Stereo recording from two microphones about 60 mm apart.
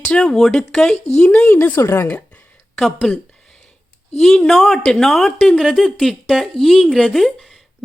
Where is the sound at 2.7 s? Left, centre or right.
Centre.